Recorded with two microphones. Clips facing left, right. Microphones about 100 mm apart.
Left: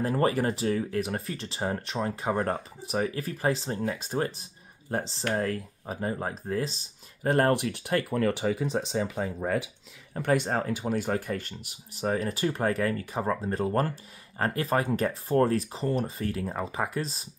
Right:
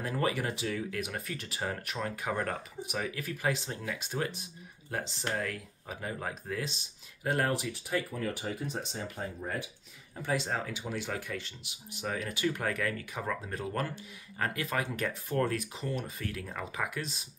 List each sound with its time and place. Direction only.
0.0 s speech: 40° left (ahead or behind)
7.2 s speech: 50° left (ahead or behind); by 9.7 s 90° left
10.1 s speech: 60° left (ahead or behind); by 17.3 s 35° left (ahead or behind)